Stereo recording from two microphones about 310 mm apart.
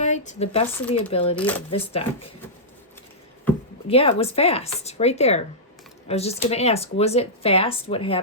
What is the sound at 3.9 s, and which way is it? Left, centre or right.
Speech, centre.